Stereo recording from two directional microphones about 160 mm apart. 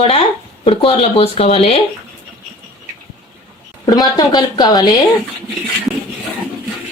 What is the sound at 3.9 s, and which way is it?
Speech, 25° left (ahead or behind).